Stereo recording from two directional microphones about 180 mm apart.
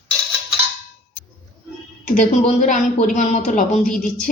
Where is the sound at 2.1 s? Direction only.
45° left (ahead or behind).